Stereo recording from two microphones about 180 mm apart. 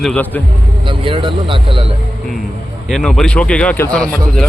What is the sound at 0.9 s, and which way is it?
Speech, 30° right (ahead or behind).